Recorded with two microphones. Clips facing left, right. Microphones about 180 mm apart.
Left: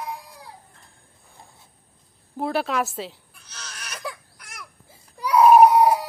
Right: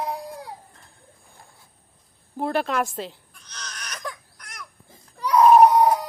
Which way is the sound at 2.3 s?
5° left (ahead or behind).